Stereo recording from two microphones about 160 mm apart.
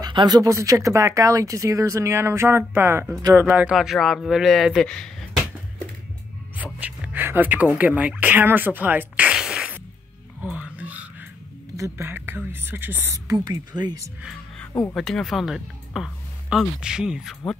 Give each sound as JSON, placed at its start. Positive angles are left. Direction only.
{"t": 0.0, "sound": "speech", "side_deg": -25}
{"t": 6.6, "sound": "speech", "side_deg": -10}
{"t": 10.4, "sound": "a sound", "side_deg": -5}
{"t": 11.7, "sound": "speech", "side_deg": -15}
{"t": 14.7, "sound": "speech", "side_deg": 20}
{"t": 15.0, "sound": "speech", "side_deg": 0}